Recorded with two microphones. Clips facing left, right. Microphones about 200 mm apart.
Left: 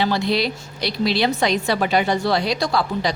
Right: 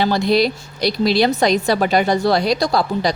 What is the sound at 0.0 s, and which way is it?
A woman's voice, 40° right (ahead or behind).